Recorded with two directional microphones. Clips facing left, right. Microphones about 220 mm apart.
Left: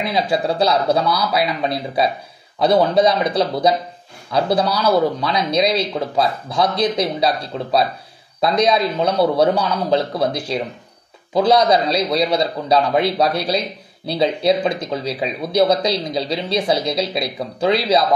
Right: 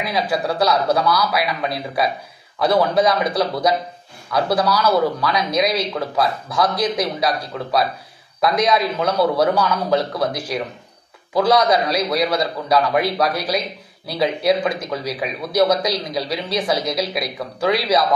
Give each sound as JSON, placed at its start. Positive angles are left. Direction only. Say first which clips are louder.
{"t": 0.0, "sound": "speech", "louder": "left 2 dB", "side_deg": 25}